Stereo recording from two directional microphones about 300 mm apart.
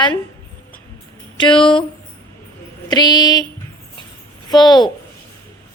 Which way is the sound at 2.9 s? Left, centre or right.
Centre.